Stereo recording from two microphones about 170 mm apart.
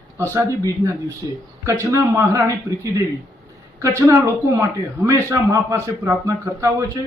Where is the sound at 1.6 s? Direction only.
20° right (ahead or behind).